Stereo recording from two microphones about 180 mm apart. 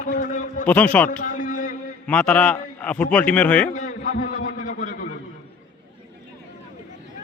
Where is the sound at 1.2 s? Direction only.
45° left (ahead or behind).